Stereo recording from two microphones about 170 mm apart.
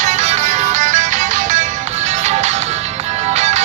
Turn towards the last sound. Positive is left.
turn(degrees=-40)  # may be behind; listen again after turning